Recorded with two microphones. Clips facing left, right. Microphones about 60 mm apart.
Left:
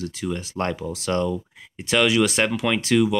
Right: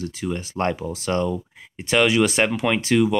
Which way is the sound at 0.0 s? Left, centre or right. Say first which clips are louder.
Right 1 dB; centre.